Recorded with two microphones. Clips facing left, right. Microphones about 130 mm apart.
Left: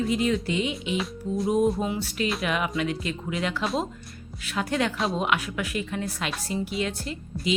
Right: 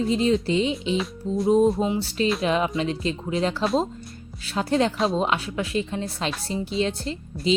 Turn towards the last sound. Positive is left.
turn(degrees=-25)  # may be behind; listen again after turning